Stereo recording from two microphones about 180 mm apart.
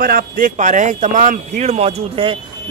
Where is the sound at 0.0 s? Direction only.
50° right (ahead or behind).